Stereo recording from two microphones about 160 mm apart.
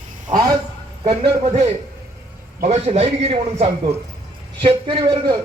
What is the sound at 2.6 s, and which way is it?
A man's voice, 40° right (ahead or behind).